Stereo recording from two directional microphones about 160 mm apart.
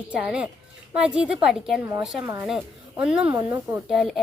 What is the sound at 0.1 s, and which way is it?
A child's voice, 5° right (ahead or behind).